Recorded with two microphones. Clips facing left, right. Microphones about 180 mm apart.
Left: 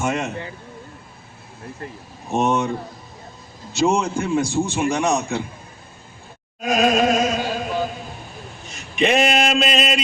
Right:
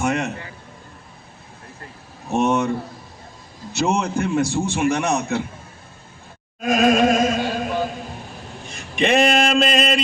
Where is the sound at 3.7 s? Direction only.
65° right (ahead or behind).